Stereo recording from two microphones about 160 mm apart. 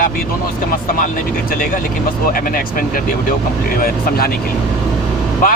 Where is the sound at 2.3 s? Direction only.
60° left (ahead or behind).